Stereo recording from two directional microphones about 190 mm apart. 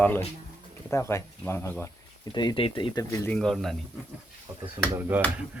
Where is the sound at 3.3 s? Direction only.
Centre (ahead or behind).